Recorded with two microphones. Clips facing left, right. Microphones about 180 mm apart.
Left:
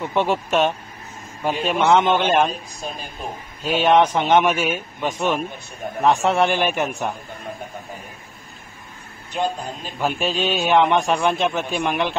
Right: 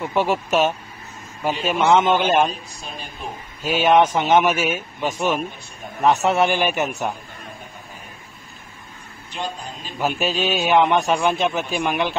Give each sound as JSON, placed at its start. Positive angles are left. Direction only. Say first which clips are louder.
{"t": 0.0, "sound": "a man's voice", "louder": "even", "side_deg": -5}
{"t": 3.6, "sound": "a man's voice", "louder": "even", "side_deg": -5}
{"t": 9.3, "sound": "speech", "louder": "left 6 dB", "side_deg": 50}
{"t": 9.9, "sound": "a man's voice", "louder": "even", "side_deg": -5}